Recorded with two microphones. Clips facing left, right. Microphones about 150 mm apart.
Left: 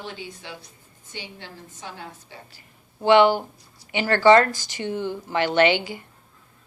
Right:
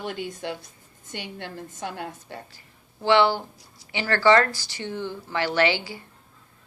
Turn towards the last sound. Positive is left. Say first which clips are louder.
# left 4 dB
turn(degrees=20)  # may be behind; listen again after turning